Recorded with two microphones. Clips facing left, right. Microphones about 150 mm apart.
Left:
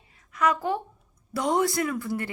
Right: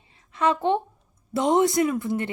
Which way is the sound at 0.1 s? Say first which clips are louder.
Right 2 dB; 30° right (ahead or behind).